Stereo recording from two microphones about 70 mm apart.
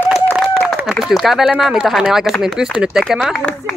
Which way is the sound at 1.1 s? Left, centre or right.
Centre.